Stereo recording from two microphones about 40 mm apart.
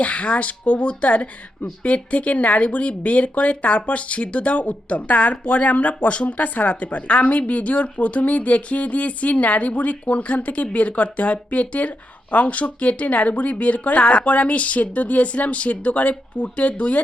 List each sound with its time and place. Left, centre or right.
0.0 s speech: left
14.0 s speech: left
14.3 s speech: left